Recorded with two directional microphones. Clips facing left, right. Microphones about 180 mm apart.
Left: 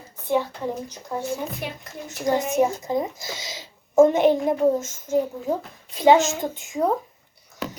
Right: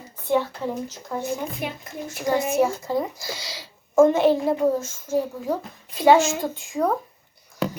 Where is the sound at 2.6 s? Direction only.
20° left (ahead or behind).